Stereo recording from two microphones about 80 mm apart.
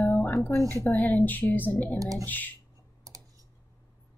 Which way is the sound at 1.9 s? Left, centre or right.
Right.